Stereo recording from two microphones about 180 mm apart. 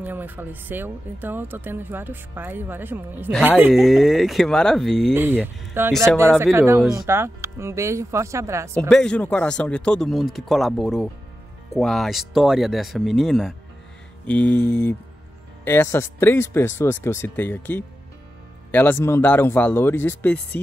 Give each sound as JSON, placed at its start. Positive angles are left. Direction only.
{"t": 0.0, "sound": "speech", "side_deg": -10}
{"t": 5.1, "sound": "speech", "side_deg": -10}
{"t": 8.7, "sound": "speech", "side_deg": 5}